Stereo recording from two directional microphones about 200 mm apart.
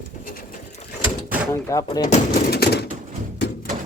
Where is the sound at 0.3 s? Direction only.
45° left (ahead or behind).